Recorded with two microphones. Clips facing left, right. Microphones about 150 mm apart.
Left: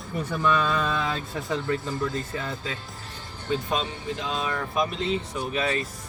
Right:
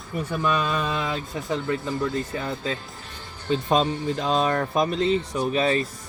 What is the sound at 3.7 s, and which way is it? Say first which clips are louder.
Speech: right 7 dB; 40° right (ahead or behind).